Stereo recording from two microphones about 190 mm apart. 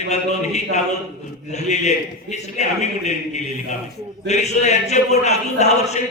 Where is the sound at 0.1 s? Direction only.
35° left (ahead or behind).